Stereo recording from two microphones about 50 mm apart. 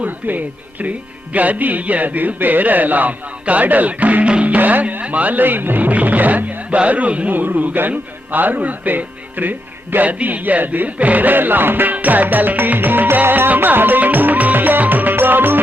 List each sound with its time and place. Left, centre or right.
0.0 s speech: right
13.6 s music: right